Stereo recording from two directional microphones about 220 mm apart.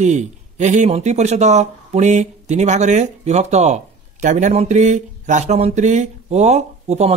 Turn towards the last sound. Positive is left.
turn(degrees=-30)  # may be behind; listen again after turning